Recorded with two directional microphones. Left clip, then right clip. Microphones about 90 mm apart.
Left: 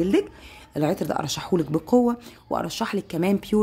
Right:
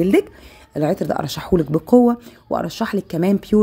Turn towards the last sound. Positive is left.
turn(degrees=-25)  # may be behind; listen again after turning